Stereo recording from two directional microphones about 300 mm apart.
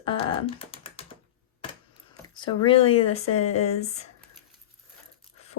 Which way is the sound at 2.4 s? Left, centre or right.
Centre.